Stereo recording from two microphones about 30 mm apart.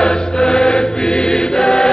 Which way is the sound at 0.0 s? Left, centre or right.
Left.